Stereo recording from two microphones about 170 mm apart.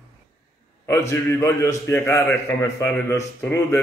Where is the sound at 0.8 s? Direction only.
15° left (ahead or behind).